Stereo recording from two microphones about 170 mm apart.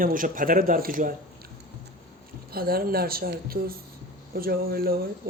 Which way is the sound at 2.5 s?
65° right (ahead or behind).